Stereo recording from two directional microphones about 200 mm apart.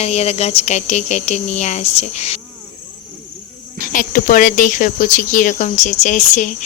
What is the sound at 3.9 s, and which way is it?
Speech, 40° left (ahead or behind).